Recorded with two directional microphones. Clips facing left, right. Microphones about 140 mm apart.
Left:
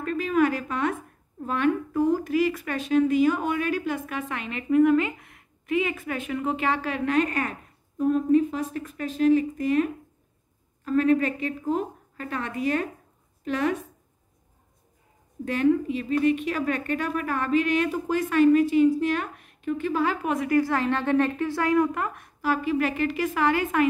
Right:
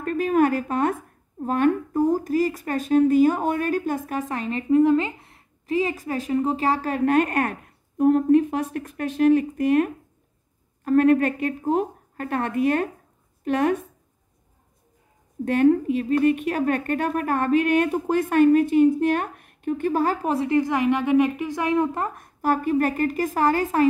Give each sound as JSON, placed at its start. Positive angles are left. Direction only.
{"t": 0.0, "sound": "a sound", "side_deg": -50}
{"t": 1.4, "sound": "a woman's voice", "side_deg": -45}
{"t": 15.4, "sound": "speech", "side_deg": -55}